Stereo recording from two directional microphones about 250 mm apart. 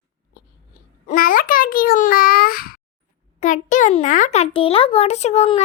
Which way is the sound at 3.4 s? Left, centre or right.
Left.